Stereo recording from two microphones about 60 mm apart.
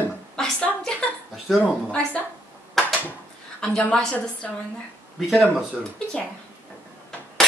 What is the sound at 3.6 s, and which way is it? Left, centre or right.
Speech, centre.